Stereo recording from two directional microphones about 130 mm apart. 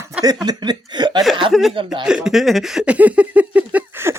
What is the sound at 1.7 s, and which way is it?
Speech, 40° right (ahead or behind).